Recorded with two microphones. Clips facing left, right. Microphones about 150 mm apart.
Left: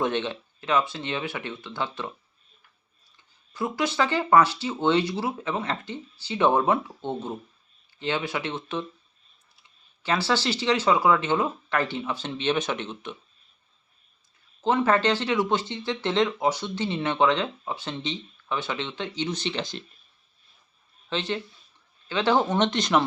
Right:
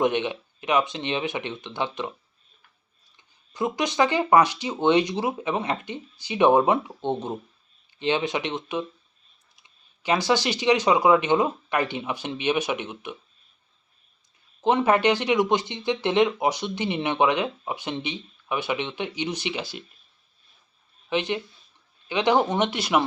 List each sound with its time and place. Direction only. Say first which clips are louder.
0.0 s speech: right 3 dB; 15° right (ahead or behind)
3.2 s speech: right 3 dB; 15° right (ahead or behind)
14.6 s speech: right 2 dB; 15° right (ahead or behind)
21.1 s speech: right 3 dB; 15° right (ahead or behind)